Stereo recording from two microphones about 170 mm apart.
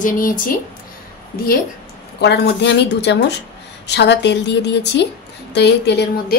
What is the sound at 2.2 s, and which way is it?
A woman's voice, 75° left (ahead or behind).